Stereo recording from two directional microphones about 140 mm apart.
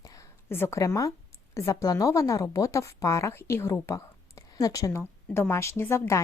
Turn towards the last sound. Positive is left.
turn(degrees=20)  # may be behind; listen again after turning